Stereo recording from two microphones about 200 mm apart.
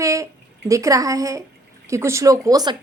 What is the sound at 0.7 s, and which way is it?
Speech, 15° right (ahead or behind).